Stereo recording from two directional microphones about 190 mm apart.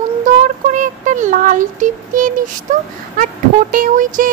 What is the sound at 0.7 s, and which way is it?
Speech, 40° right (ahead or behind).